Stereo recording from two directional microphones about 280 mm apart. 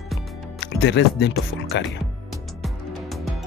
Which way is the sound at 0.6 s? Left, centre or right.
Left.